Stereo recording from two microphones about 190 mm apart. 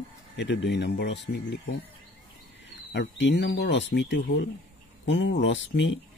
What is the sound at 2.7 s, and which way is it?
Speech, 70° left (ahead or behind).